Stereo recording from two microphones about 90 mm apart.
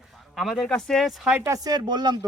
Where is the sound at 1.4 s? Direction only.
40° right (ahead or behind).